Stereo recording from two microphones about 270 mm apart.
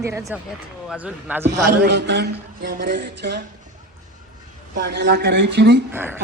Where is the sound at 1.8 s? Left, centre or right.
Right.